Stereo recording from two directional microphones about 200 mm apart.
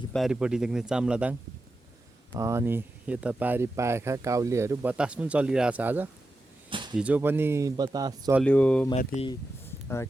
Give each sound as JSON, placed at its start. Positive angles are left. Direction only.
{"t": 0.1, "sound": "speech", "side_deg": 0}
{"t": 6.7, "sound": "a sound", "side_deg": -25}
{"t": 6.9, "sound": "speech", "side_deg": -5}
{"t": 8.4, "sound": "speech", "side_deg": 5}
{"t": 9.0, "sound": "speech", "side_deg": 30}